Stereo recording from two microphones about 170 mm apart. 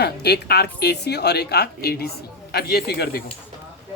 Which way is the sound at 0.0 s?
70° left (ahead or behind).